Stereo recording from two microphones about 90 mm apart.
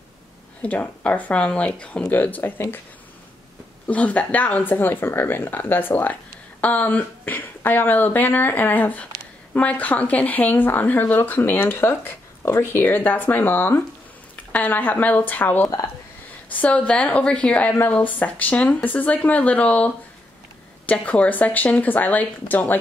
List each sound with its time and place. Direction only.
0.6 s speech: 15° left (ahead or behind)
3.8 s speech: 15° left (ahead or behind)